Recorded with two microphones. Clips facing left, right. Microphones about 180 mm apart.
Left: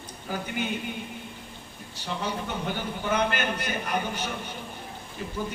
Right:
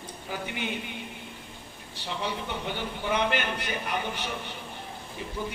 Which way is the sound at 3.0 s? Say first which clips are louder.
Left 1 dB; 45° left (ahead or behind).